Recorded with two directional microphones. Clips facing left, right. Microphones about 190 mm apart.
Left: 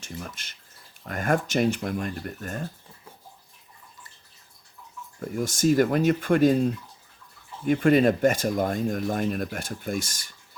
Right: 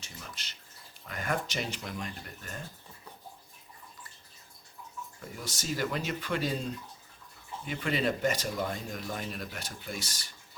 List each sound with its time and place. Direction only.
0.0 s speech: 50° left (ahead or behind)
5.2 s speech: 50° left (ahead or behind)